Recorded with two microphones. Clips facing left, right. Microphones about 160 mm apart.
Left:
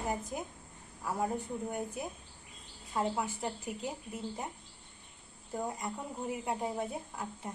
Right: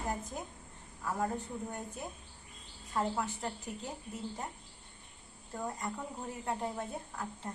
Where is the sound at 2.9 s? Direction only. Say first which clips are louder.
Left 1 dB; 10° left (ahead or behind).